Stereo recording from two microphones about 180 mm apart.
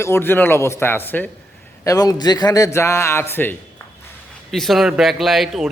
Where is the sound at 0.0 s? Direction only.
15° left (ahead or behind).